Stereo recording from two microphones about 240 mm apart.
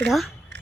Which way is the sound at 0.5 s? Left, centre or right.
Right.